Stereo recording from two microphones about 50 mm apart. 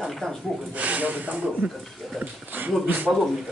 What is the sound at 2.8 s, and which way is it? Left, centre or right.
Speech, right.